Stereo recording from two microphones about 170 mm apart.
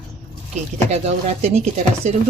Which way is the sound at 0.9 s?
40° right (ahead or behind).